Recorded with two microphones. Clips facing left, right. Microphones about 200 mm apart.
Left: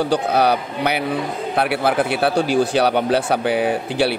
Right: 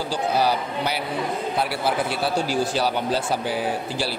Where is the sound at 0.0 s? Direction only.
65° left (ahead or behind).